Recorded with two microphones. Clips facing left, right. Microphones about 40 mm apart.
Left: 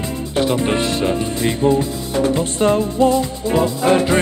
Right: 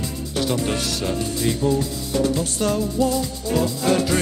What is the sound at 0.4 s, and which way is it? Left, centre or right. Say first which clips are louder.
Speech: left 6 dB; left.